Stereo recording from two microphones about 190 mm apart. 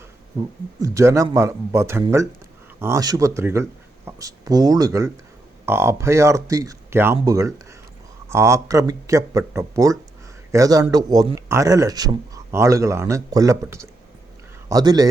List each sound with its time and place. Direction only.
0.8 s a man's voice: 15° right (ahead or behind)